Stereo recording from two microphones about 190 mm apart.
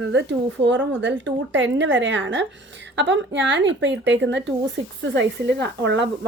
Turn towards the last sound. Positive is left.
turn(degrees=-65)  # may be behind; listen again after turning